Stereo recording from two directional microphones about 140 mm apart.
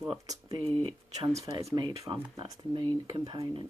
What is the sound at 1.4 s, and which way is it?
Speech, 25° right (ahead or behind).